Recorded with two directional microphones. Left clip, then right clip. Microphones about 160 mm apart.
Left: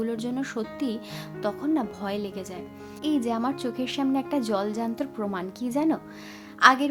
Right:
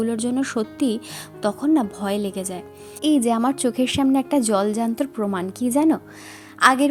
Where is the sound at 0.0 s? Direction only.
35° right (ahead or behind).